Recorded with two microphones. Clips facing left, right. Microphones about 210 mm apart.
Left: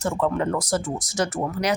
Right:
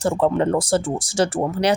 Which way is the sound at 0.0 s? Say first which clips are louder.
Right 5 dB; 30° right (ahead or behind).